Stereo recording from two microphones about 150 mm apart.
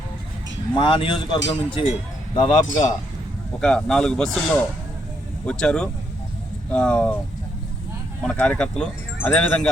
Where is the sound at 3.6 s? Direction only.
5° left (ahead or behind).